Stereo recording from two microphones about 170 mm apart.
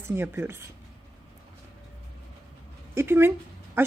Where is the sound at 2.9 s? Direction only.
15° right (ahead or behind).